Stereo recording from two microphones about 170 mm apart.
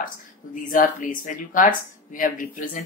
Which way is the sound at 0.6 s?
55° left (ahead or behind).